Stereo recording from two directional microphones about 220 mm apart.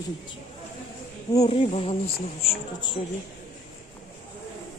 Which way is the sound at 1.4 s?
30° left (ahead or behind).